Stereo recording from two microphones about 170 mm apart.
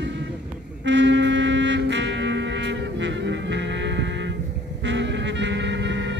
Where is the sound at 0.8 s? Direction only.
90° right.